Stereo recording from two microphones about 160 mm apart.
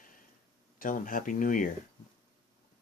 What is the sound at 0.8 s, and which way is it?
Speech, 60° left (ahead or behind).